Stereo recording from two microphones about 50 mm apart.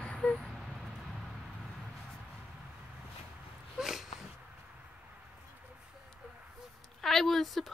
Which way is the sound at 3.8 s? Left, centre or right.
Centre.